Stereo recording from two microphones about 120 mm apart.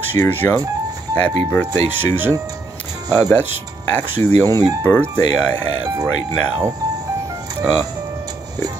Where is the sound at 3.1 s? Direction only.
15° left (ahead or behind).